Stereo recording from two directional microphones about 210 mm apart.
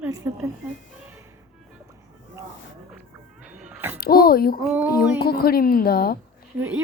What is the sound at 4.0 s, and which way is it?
Speech, 45° left (ahead or behind).